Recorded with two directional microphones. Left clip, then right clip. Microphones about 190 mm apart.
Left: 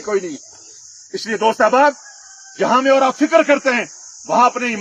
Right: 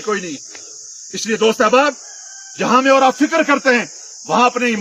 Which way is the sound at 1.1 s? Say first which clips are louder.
Right 1 dB; 55° right (ahead or behind).